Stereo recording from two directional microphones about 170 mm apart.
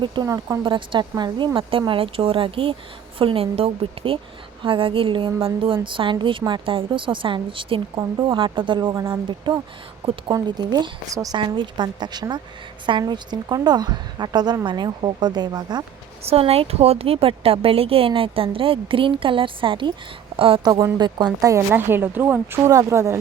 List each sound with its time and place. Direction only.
0.0 s a woman's voice: 25° right (ahead or behind)
16.2 s a woman's voice: 35° right (ahead or behind); by 23.1 s 15° right (ahead or behind)